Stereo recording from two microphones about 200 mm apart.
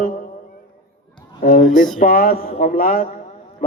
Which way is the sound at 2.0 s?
45° left (ahead or behind).